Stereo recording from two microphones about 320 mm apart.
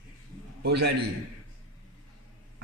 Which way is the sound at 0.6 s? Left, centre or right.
Right.